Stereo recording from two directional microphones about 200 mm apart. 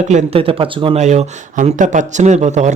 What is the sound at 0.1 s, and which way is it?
Speech, 35° right (ahead or behind).